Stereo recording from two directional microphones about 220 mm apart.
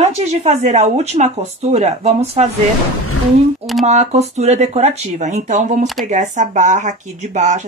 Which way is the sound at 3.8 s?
30° right (ahead or behind).